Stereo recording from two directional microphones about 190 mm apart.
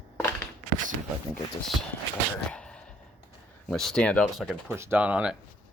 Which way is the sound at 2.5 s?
5° left (ahead or behind).